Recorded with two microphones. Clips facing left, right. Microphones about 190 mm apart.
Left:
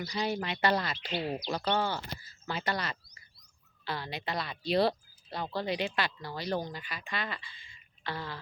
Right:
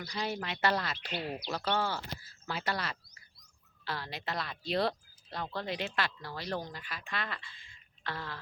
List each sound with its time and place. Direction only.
0.1 s speech: centre (ahead or behind)
1.1 s speech: 25° left (ahead or behind)
1.5 s speech: 5° right (ahead or behind)